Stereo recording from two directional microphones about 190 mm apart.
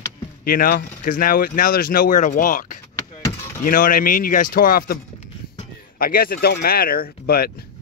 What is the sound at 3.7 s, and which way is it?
Speech, 45° left (ahead or behind).